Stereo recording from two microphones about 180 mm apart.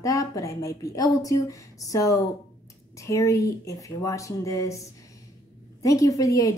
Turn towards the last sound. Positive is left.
turn(degrees=20)  # may be behind; listen again after turning